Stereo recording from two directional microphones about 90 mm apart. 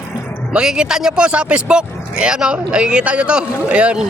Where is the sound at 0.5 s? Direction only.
10° right (ahead or behind).